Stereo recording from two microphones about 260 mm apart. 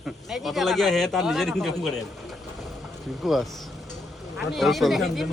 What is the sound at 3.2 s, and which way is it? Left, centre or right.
A man's voice, centre.